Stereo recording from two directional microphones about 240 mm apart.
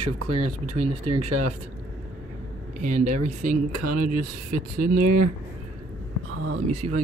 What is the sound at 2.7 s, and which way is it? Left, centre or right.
Speech, right.